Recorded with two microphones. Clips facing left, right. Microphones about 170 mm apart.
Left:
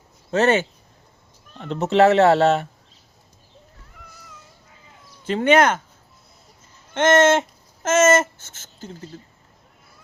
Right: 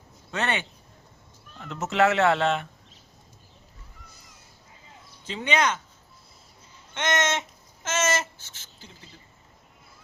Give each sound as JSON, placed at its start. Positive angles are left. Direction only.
{"t": 0.3, "sound": "speech", "side_deg": 40}
{"t": 5.2, "sound": "speech", "side_deg": 50}
{"t": 6.9, "sound": "speech", "side_deg": 50}